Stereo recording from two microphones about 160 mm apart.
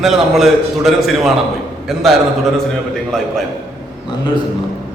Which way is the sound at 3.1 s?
5° left (ahead or behind).